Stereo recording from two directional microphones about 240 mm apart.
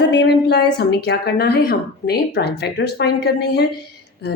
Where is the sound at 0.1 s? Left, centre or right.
Left.